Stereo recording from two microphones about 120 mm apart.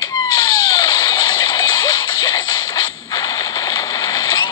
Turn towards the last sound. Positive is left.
turn(degrees=30)  # may be behind; listen again after turning